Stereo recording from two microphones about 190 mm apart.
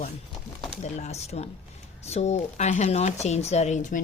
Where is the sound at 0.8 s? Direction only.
35° left (ahead or behind).